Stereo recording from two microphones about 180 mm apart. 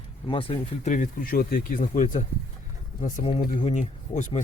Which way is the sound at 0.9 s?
50° left (ahead or behind).